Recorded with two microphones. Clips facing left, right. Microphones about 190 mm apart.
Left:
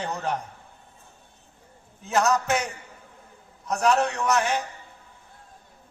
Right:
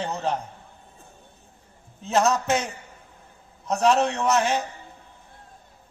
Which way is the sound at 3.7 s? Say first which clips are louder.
Right 2 dB; 25° right (ahead or behind).